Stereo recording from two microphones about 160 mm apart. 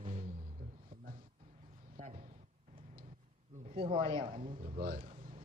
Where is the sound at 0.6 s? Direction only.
70° right (ahead or behind).